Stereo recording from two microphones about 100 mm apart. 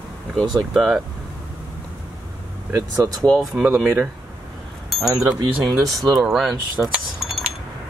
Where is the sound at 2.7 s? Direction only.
35° right (ahead or behind).